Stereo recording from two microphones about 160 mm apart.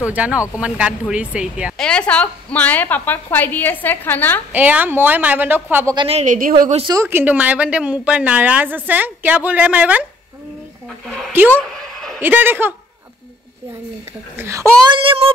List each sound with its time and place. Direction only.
0.0 s a woman's voice: 10° right (ahead or behind)
1.8 s a woman's voice: 5° left (ahead or behind)
4.5 s a woman's voice: 10° right (ahead or behind)
5.9 s child singing: 40° right (ahead or behind)
6.2 s speech: 55° right (ahead or behind)
6.9 s a woman's voice: 15° right (ahead or behind)
11.5 s a sound: centre (ahead or behind)
12.2 s a woman's voice: 15° right (ahead or behind)
14.3 s a woman's voice: 15° right (ahead or behind)
15.0 s child singing: 35° right (ahead or behind)